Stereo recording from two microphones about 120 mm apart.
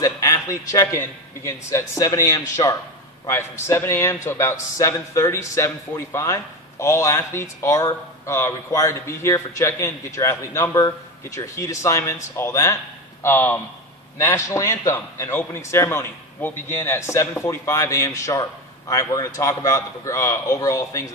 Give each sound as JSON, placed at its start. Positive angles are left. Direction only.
{"t": 0.0, "sound": "a man's voice", "side_deg": 25}